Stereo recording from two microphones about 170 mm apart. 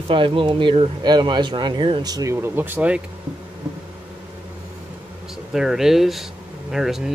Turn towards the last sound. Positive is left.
turn(degrees=0)  # may be behind; listen again after turning